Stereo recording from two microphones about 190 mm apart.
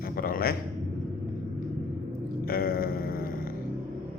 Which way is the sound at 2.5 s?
50° left (ahead or behind).